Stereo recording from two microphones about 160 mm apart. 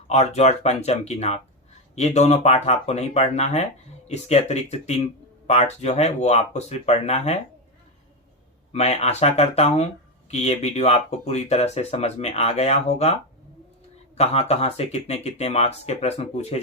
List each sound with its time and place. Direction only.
0.1 s speech: 40° left (ahead or behind)
8.7 s speech: 40° left (ahead or behind)
14.2 s speech: 40° left (ahead or behind)